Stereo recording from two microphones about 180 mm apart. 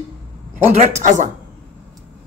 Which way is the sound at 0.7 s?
40° right (ahead or behind).